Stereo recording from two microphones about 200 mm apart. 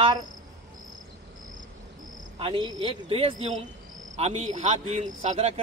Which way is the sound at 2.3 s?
25° right (ahead or behind).